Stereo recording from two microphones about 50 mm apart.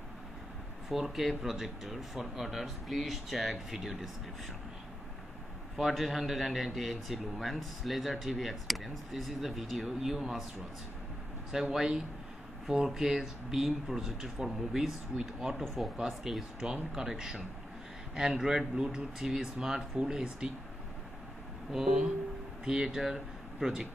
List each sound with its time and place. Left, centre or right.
0.8 s a man's voice: centre
5.8 s a man's voice: centre
11.7 s a man's voice: centre
15.6 s a man's voice: centre
21.7 s speech: centre